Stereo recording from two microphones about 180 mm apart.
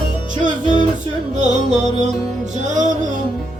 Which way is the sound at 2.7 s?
45° right (ahead or behind).